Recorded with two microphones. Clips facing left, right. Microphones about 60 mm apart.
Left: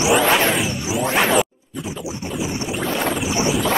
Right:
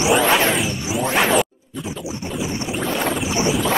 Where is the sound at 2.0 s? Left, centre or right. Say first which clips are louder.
Even; left.